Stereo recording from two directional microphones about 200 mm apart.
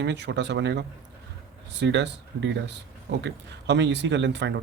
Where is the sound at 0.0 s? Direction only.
60° right (ahead or behind).